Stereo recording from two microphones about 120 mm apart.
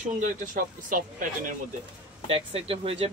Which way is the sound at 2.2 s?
50° right (ahead or behind).